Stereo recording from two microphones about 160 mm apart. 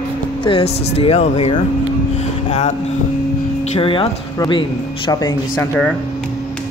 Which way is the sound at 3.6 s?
35° left (ahead or behind).